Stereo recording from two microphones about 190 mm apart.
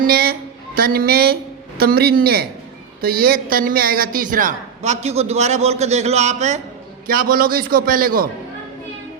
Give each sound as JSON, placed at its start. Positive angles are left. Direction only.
{"t": 0.0, "sound": "a woman's voice", "side_deg": -50}
{"t": 7.1, "sound": "a man's voice", "side_deg": -50}